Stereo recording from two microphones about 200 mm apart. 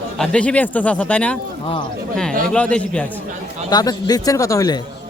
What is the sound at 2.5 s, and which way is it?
Speech, 5° left (ahead or behind).